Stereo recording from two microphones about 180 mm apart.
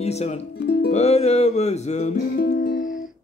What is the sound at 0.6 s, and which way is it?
Music, 65° left (ahead or behind).